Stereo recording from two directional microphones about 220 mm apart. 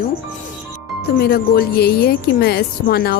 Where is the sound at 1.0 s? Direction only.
45° left (ahead or behind).